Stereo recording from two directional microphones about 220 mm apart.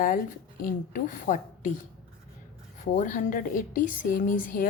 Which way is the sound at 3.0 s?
35° left (ahead or behind).